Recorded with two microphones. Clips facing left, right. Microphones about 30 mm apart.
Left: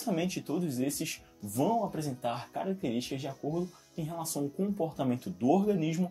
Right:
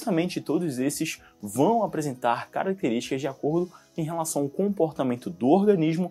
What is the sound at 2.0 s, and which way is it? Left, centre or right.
Speech, right.